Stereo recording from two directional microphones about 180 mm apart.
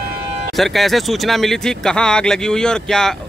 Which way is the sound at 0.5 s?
Centre (ahead or behind).